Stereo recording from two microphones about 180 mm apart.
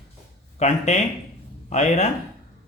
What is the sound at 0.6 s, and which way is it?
Speech, 40° left (ahead or behind).